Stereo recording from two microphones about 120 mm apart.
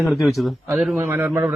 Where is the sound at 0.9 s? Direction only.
15° right (ahead or behind).